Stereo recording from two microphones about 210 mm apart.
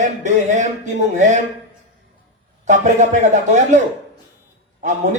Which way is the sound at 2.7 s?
35° right (ahead or behind).